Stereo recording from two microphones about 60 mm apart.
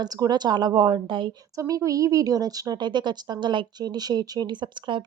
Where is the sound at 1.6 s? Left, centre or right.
Right.